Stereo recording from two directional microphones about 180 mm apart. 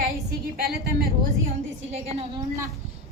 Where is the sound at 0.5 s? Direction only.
60° right (ahead or behind).